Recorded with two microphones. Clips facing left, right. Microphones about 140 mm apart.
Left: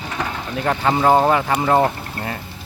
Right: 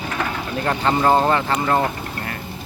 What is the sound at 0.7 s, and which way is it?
Speech, 10° left (ahead or behind).